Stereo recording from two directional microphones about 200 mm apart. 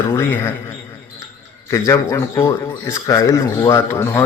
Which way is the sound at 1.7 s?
15° left (ahead or behind).